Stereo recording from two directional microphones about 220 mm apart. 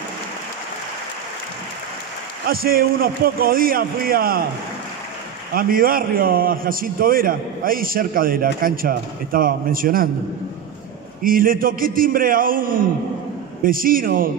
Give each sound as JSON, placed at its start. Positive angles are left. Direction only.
{"t": 2.4, "sound": "a man's voice", "side_deg": -40}
{"t": 5.5, "sound": "a man's voice", "side_deg": -40}
{"t": 11.2, "sound": "a man's voice", "side_deg": -40}